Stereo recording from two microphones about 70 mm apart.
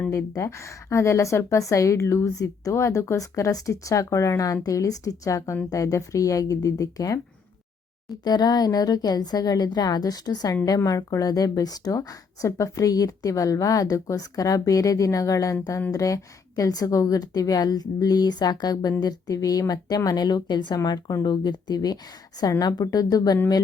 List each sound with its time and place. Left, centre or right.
0.1 s a woman's voice: left
8.2 s a woman's voice: left
10.8 s a woman's voice: left
21.2 s a woman's voice: left
22.4 s speech: left